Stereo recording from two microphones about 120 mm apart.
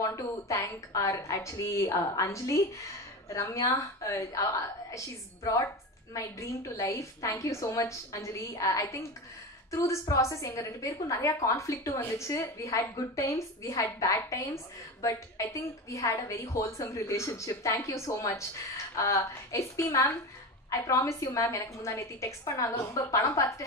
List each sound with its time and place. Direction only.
0.0 s a woman's voice: 25° left (ahead or behind)